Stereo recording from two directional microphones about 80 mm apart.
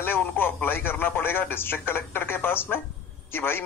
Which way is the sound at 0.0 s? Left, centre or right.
Left.